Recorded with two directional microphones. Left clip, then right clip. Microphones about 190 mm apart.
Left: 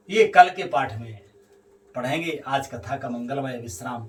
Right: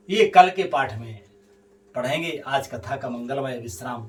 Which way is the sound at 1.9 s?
15° right (ahead or behind).